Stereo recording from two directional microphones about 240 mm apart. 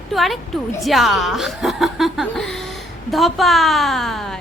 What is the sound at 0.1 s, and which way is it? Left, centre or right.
A woman's voice, centre.